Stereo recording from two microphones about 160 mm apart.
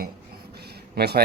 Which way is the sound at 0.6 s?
85° right.